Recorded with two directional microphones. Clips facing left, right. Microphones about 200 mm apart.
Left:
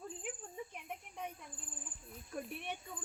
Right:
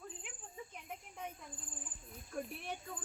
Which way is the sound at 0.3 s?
45° left (ahead or behind).